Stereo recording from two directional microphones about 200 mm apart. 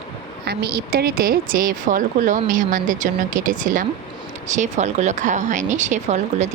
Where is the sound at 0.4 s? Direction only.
50° right (ahead or behind).